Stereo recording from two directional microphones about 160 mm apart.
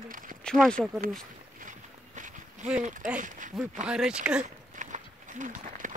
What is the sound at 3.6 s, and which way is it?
Speech, 5° right (ahead or behind).